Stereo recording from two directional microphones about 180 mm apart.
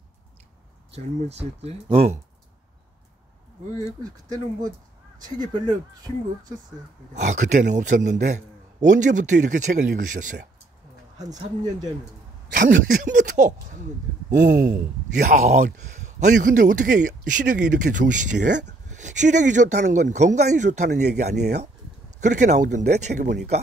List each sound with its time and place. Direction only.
0.9 s speech: 35° right (ahead or behind)
7.2 s speech: 40° right (ahead or behind)
11.1 s speech: 20° right (ahead or behind)
12.5 s speech: 50° right (ahead or behind)
20.9 s speech: 65° right (ahead or behind)
22.2 s speech: 40° right (ahead or behind)
23.2 s speech: 65° right (ahead or behind)